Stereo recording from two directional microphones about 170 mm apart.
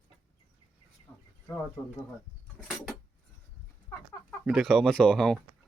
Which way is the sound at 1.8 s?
10° left (ahead or behind).